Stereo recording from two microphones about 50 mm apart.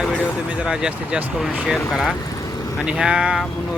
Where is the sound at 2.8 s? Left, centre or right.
Centre.